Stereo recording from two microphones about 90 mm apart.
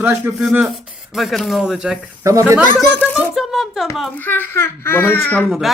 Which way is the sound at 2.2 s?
35° right (ahead or behind).